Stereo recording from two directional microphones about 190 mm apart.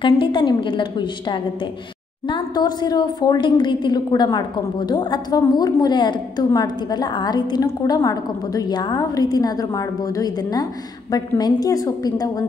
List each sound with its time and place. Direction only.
0.0 s a woman's voice: 25° left (ahead or behind)